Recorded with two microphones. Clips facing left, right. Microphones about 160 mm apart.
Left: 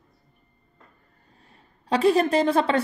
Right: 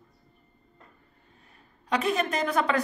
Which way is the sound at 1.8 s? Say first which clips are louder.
Left 7 dB; 30° left (ahead or behind).